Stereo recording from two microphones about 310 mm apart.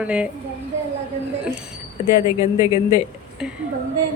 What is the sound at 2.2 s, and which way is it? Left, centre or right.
Speech, centre.